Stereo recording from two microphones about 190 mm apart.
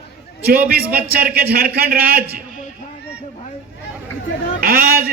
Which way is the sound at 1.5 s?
55° right (ahead or behind).